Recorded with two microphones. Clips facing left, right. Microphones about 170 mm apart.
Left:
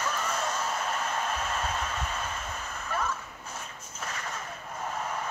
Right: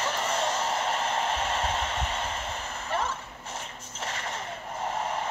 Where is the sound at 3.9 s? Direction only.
25° right (ahead or behind).